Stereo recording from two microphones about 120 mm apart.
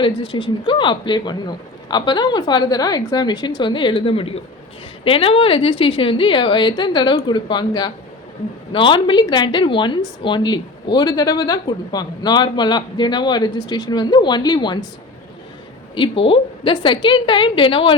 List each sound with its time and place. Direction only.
0.0 s a woman's voice: 45° left (ahead or behind)
16.0 s a woman's voice: 50° left (ahead or behind)